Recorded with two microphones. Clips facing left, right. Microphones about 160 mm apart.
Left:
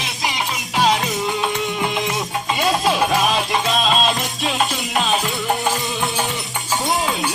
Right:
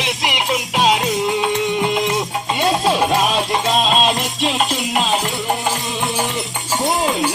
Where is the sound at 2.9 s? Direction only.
25° right (ahead or behind).